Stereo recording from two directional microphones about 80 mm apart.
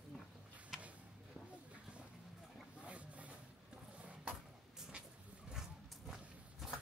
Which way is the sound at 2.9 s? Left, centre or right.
Centre.